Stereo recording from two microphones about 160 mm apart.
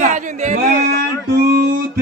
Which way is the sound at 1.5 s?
75° right (ahead or behind).